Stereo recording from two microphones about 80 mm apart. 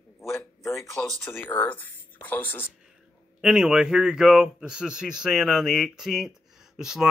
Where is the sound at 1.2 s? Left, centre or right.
Left.